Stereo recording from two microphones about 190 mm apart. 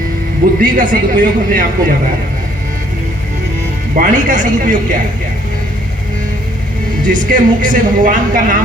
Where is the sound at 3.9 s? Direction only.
40° right (ahead or behind).